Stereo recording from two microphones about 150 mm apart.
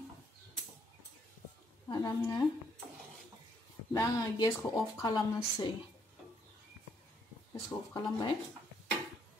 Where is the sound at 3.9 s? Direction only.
20° left (ahead or behind).